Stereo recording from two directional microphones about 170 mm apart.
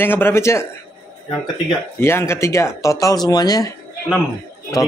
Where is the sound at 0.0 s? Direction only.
10° left (ahead or behind).